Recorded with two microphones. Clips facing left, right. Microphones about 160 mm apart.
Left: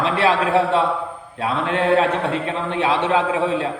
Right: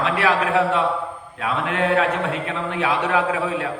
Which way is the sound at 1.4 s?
30° left (ahead or behind).